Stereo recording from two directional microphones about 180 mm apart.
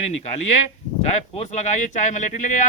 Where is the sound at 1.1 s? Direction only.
40° left (ahead or behind).